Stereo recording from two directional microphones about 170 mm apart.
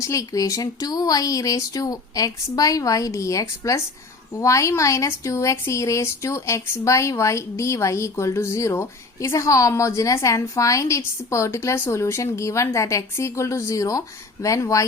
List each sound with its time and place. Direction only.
0.0 s speech: 20° left (ahead or behind)